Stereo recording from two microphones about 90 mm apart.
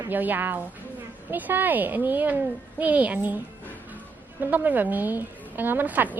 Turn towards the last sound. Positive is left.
turn(degrees=-20)  # may be behind; listen again after turning